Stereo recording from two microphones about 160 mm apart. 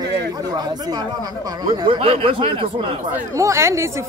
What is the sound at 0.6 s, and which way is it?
Speech, 25° right (ahead or behind).